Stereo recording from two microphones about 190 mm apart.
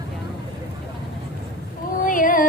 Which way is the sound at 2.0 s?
45° left (ahead or behind).